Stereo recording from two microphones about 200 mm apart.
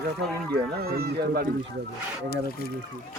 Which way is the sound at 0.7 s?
50° right (ahead or behind).